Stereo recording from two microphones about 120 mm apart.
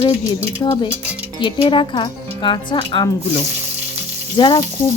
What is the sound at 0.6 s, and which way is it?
Frying, 40° left (ahead or behind).